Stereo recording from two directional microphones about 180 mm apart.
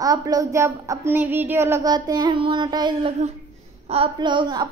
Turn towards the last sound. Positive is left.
turn(degrees=-25)  # may be behind; listen again after turning